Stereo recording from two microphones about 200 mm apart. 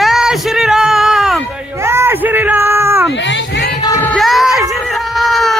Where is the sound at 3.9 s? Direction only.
10° left (ahead or behind).